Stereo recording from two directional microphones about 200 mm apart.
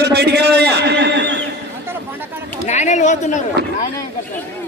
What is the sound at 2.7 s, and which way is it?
Speech, 35° left (ahead or behind).